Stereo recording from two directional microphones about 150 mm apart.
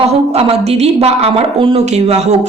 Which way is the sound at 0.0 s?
40° right (ahead or behind).